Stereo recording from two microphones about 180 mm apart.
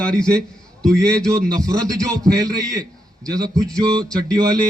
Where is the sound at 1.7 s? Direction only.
20° right (ahead or behind).